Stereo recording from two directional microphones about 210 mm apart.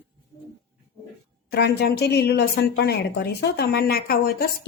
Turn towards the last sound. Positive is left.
turn(degrees=45)  # may be behind; listen again after turning